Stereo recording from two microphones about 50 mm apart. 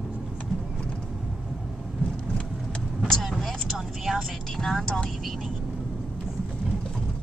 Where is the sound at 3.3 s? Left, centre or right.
Centre.